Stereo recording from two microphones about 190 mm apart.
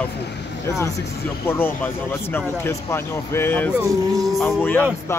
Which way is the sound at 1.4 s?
10° left (ahead or behind).